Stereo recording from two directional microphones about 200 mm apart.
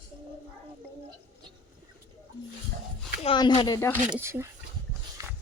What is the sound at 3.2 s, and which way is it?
Speech, 25° left (ahead or behind).